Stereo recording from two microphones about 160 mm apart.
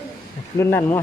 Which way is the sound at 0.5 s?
15° left (ahead or behind).